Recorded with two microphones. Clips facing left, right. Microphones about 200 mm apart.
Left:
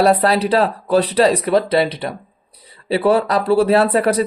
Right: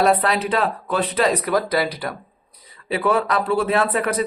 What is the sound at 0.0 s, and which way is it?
Speech, 35° left (ahead or behind).